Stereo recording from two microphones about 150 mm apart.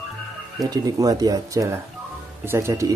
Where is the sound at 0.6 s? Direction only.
25° right (ahead or behind).